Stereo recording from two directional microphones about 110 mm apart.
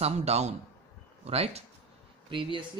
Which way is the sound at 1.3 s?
70° right (ahead or behind).